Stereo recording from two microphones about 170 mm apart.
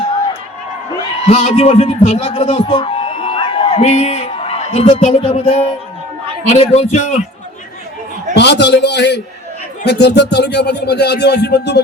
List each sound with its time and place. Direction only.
1.3 s a man's voice: 40° left (ahead or behind)
8.4 s speech: 85° left